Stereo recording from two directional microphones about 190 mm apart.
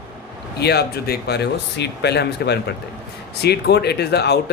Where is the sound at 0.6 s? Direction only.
60° left (ahead or behind).